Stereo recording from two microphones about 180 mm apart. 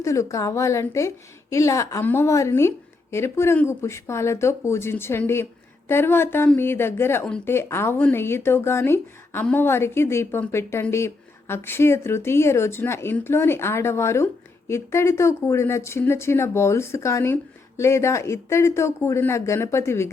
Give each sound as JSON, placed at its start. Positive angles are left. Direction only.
{"t": 0.0, "sound": "a woman's voice", "side_deg": 15}